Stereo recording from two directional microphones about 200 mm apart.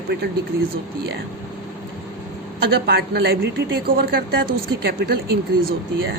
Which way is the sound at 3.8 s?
45° right (ahead or behind).